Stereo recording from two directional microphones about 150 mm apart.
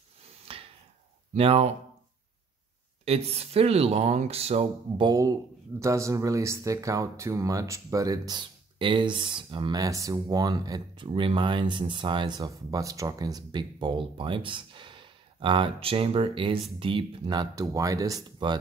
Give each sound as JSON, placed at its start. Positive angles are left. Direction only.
{"t": 0.5, "sound": "a sound", "side_deg": -40}
{"t": 1.3, "sound": "speech", "side_deg": -40}
{"t": 3.1, "sound": "speech", "side_deg": -45}
{"t": 5.0, "sound": "speech", "side_deg": -25}